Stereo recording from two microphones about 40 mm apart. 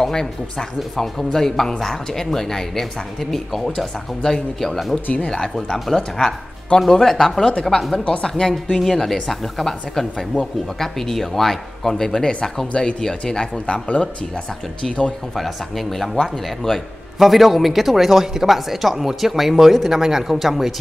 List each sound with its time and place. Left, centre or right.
0.0 s speech: centre
8.0 s speech: left
13.8 s speech: left
15.3 s a man's voice: centre
19.9 s speech: centre